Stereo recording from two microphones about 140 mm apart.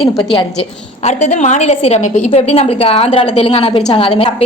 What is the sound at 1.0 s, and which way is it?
A woman's voice, 60° left (ahead or behind).